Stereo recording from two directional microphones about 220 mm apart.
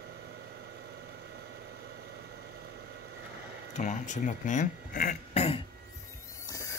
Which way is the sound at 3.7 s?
35° left (ahead or behind).